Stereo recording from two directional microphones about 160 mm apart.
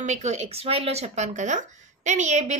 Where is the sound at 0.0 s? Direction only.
45° right (ahead or behind).